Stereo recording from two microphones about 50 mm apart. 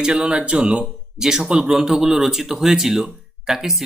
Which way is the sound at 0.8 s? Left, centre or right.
Centre.